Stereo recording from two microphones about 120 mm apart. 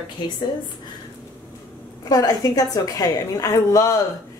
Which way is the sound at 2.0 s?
30° left (ahead or behind).